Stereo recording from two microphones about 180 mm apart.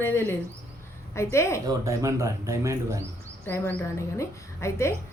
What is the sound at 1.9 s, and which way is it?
Speech, 15° right (ahead or behind).